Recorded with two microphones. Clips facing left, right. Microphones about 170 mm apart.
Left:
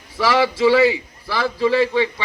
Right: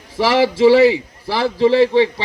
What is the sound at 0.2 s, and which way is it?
A man's voice, 30° right (ahead or behind).